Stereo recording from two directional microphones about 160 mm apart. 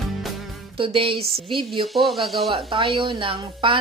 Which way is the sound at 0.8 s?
35° right (ahead or behind).